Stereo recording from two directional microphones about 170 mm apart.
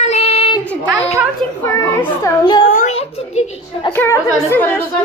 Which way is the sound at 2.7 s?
45° left (ahead or behind).